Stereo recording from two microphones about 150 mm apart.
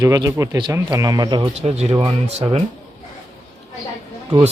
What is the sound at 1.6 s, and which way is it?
Speech, 45° right (ahead or behind).